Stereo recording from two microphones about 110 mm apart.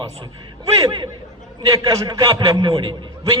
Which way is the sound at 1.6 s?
35° right (ahead or behind).